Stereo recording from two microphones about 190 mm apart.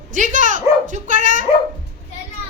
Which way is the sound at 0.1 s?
40° right (ahead or behind).